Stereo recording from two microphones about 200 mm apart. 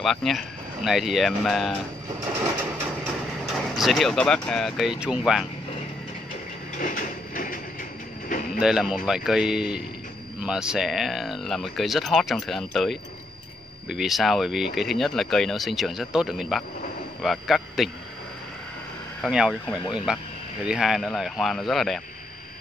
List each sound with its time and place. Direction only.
0.0 s speech: centre (ahead or behind)
3.7 s speech: centre (ahead or behind)
6.8 s a sound: 40° left (ahead or behind)
8.5 s speech: 5° right (ahead or behind)
19.2 s speech: 5° right (ahead or behind)